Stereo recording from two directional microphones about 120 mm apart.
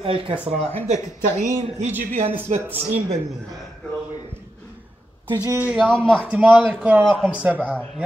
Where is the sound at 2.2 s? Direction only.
55° right (ahead or behind).